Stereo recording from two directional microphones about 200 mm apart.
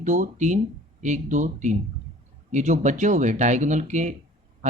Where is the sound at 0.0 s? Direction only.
35° right (ahead or behind).